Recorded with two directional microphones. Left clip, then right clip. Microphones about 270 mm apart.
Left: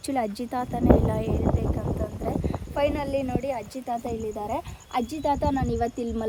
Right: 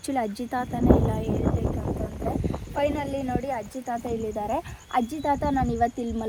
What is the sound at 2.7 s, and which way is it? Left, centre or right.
Speech, centre.